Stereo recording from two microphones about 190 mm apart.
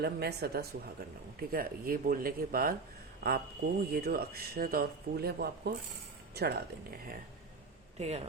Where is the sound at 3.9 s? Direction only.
55° right (ahead or behind).